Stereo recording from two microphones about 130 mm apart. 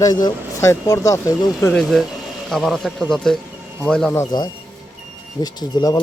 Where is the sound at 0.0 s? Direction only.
30° left (ahead or behind).